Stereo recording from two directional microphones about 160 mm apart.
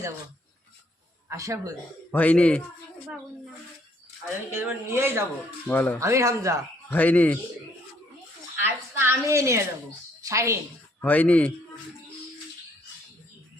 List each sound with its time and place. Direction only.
1.3 s speech: 20° right (ahead or behind)
2.0 s speech: 10° left (ahead or behind)
4.5 s a woman's voice: 15° right (ahead or behind)
5.6 s speech: 10° left (ahead or behind)
6.0 s speech: 20° right (ahead or behind)
6.8 s speech: 10° left (ahead or behind)
8.6 s a woman's voice: 15° right (ahead or behind)
11.0 s speech: 10° left (ahead or behind)